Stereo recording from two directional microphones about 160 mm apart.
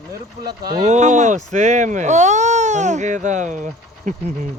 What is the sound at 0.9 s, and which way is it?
Speech, 45° right (ahead or behind).